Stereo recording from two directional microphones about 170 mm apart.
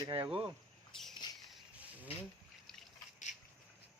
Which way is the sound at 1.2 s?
25° left (ahead or behind).